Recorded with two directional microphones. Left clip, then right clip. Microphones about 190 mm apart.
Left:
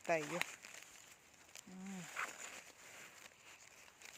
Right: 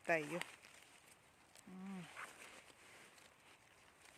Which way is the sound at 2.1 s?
40° left (ahead or behind).